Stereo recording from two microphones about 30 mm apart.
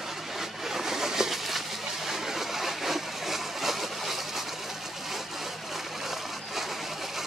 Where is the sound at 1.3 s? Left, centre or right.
Centre.